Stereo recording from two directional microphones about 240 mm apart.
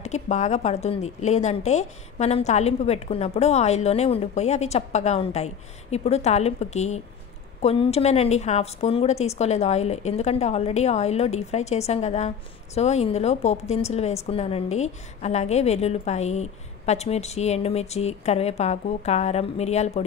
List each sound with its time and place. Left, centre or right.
0.0 s a woman's voice: left